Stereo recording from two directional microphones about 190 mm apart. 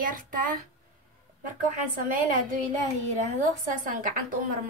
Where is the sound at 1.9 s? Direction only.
45° right (ahead or behind).